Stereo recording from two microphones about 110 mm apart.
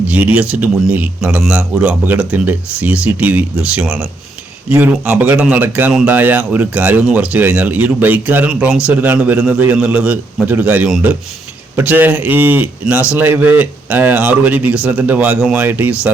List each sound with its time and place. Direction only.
0.3 s a man's voice: 15° right (ahead or behind)
5.0 s a man's voice: 15° right (ahead or behind)